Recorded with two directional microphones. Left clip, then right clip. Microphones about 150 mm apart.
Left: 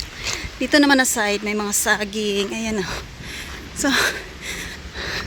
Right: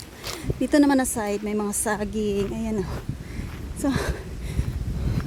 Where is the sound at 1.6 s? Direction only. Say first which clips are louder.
Left 7 dB; 30° right (ahead or behind).